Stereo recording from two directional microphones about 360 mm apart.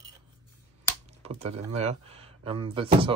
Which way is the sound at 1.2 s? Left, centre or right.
Centre.